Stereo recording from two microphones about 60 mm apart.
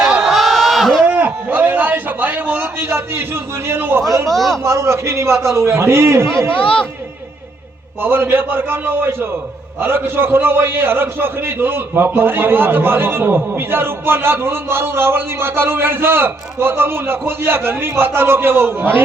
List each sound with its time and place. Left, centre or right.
0.0 s crowd: centre
1.0 s a sound: right
2.7 s a man's voice: right
4.0 s a man's voice: right
4.3 s speech: centre
4.6 s a man's voice: right
8.0 s a man's voice: right